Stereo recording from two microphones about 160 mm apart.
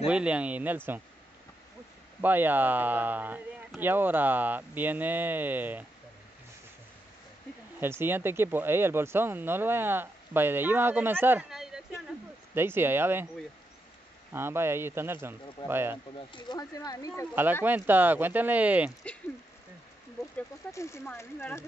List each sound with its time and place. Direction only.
0.0 s speech: 5° right (ahead or behind)
2.2 s speech: 10° right (ahead or behind)
7.8 s speech: 15° right (ahead or behind)
11.5 s a sound: 5° right (ahead or behind)
12.5 s speech: 15° right (ahead or behind)
14.3 s speech: 15° right (ahead or behind)
16.3 s speech: 30° left (ahead or behind)
17.6 s speech: 10° right (ahead or behind)
20.3 s speech: 15° left (ahead or behind)